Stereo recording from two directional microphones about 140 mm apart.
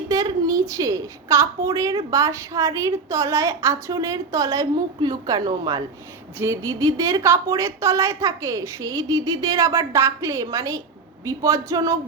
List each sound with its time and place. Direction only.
0.1 s a woman's voice: 25° right (ahead or behind)